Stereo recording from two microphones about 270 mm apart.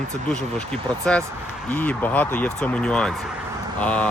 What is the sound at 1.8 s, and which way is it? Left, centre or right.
Speech, centre.